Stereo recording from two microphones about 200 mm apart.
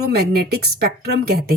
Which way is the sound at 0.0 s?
50° right (ahead or behind).